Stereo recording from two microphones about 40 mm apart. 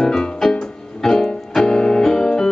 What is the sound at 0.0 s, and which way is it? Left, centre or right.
Music, centre.